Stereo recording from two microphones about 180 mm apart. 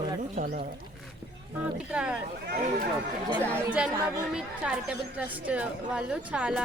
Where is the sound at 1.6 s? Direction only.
5° right (ahead or behind).